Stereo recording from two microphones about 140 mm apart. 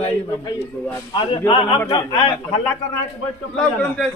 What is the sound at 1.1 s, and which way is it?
Speech, 35° left (ahead or behind).